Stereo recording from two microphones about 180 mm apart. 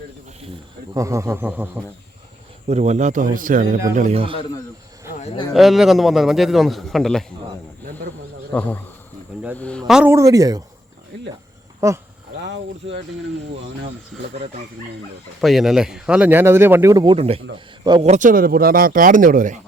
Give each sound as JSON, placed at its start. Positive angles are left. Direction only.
{"t": 0.9, "sound": "speech", "side_deg": -15}
{"t": 2.6, "sound": "speech", "side_deg": -40}
{"t": 3.9, "sound": "a man's voice", "side_deg": -35}
{"t": 5.2, "sound": "speech", "side_deg": 30}
{"t": 5.5, "sound": "a man's voice", "side_deg": 0}
{"t": 8.5, "sound": "a man's voice", "side_deg": 10}
{"t": 10.1, "sound": "speech", "side_deg": -20}
{"t": 11.8, "sound": "speech", "side_deg": -20}
{"t": 12.4, "sound": "speech", "side_deg": -75}
{"t": 14.3, "sound": "a man's voice", "side_deg": -35}
{"t": 15.4, "sound": "speech", "side_deg": 0}
{"t": 17.2, "sound": "a man's voice", "side_deg": -35}